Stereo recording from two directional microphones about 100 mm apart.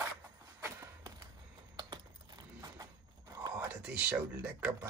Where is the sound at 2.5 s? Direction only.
35° right (ahead or behind).